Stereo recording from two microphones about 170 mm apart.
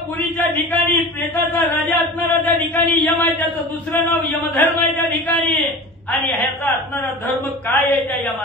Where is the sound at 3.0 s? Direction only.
10° left (ahead or behind).